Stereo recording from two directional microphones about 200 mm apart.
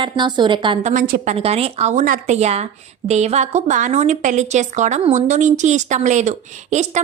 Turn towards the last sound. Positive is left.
turn(degrees=-35)  # may be behind; listen again after turning